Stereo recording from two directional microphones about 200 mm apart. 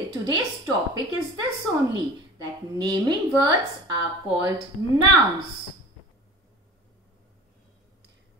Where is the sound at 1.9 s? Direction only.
20° right (ahead or behind).